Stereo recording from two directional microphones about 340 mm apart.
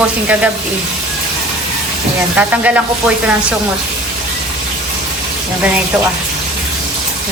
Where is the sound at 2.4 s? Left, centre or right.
Centre.